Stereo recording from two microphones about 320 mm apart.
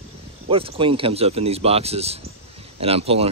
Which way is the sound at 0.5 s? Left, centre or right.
Centre.